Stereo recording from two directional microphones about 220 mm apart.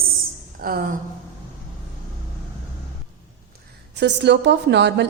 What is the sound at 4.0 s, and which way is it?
A woman's voice, 50° right (ahead or behind).